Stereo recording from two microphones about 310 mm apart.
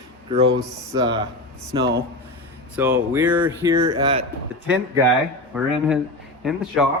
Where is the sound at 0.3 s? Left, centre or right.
Centre.